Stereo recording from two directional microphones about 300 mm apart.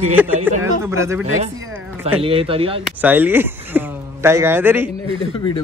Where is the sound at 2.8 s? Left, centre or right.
Centre.